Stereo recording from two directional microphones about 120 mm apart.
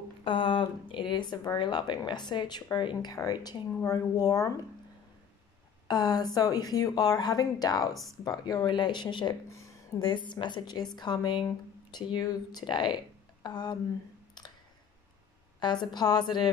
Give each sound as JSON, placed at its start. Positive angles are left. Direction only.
{"t": 0.2, "sound": "speech", "side_deg": 45}
{"t": 5.9, "sound": "speech", "side_deg": 35}
{"t": 7.9, "sound": "speech", "side_deg": 0}
{"t": 8.2, "sound": "speech", "side_deg": 30}
{"t": 14.4, "sound": "a sound", "side_deg": 35}
{"t": 15.6, "sound": "speech", "side_deg": 40}